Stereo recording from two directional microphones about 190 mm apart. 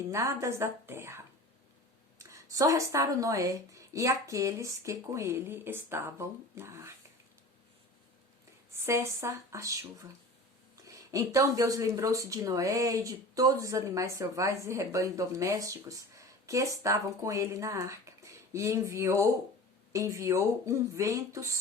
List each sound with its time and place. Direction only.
0.1 s speech: 15° right (ahead or behind)
8.9 s speech: 15° right (ahead or behind)